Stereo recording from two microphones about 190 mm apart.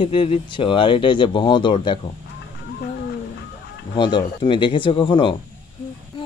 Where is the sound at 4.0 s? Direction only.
25° left (ahead or behind).